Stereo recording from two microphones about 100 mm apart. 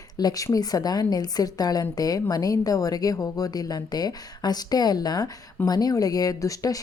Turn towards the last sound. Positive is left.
turn(degrees=35)  # may be behind; listen again after turning